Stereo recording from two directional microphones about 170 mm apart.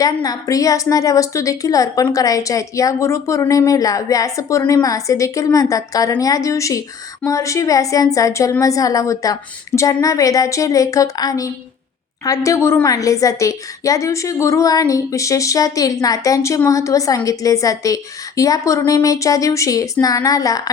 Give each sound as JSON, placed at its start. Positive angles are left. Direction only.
{"t": 0.0, "sound": "a woman's voice", "side_deg": 20}